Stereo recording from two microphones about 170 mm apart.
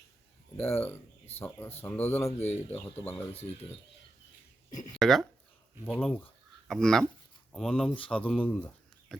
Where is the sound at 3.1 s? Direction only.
35° left (ahead or behind).